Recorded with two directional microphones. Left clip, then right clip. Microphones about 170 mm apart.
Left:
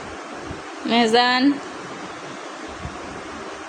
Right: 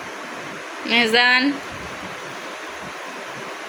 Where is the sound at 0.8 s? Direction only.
30° left (ahead or behind).